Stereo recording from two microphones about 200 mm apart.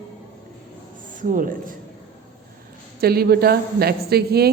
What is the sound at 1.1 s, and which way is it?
Speech, 40° right (ahead or behind).